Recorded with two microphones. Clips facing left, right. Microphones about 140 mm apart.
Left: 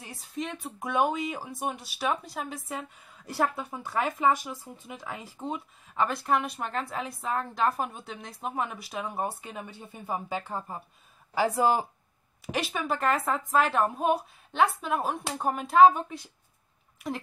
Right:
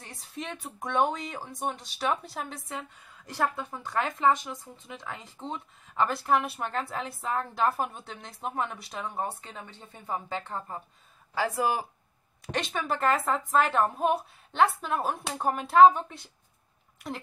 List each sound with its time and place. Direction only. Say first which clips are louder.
0.0 s speech: left 4 dB; centre (ahead or behind)
11.5 s speech: left 4 dB; 25° left (ahead or behind)
12.4 s speech: left 1 dB; 5° left (ahead or behind)